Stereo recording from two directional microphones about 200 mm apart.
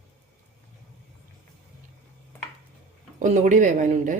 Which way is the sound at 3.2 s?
35° right (ahead or behind).